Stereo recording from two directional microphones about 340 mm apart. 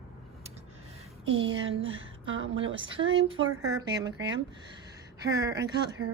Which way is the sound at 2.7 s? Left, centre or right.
Centre.